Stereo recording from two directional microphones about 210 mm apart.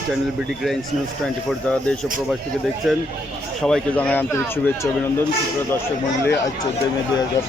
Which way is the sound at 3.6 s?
5° left (ahead or behind).